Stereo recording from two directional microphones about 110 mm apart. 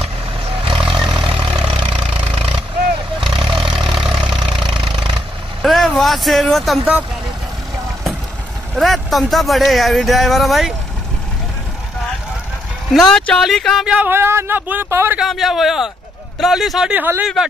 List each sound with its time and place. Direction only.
0.7 s vehicle: 50° right (ahead or behind)
3.4 s vehicle: 5° right (ahead or behind)
4.4 s vehicle: 50° right (ahead or behind)
5.6 s speech: centre (ahead or behind)
8.7 s speech: centre (ahead or behind)
12.9 s speech: 5° left (ahead or behind)
13.8 s speech: 15° right (ahead or behind)
15.1 s speech: centre (ahead or behind)
17.0 s speech: 20° right (ahead or behind)